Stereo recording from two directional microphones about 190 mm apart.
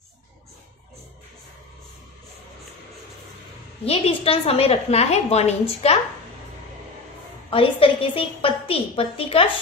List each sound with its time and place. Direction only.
3.8 s a woman's voice: 30° left (ahead or behind)
7.5 s a woman's voice: 30° left (ahead or behind)